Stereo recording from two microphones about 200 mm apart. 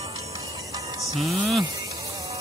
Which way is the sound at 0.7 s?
15° right (ahead or behind).